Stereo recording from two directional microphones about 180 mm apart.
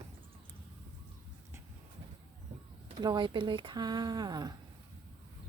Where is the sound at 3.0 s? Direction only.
25° right (ahead or behind).